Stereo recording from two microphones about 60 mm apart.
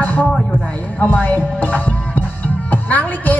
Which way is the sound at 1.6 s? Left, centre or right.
Left.